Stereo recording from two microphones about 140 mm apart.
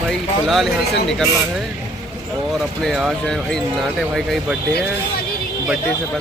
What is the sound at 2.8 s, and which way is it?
Speech, centre (ahead or behind).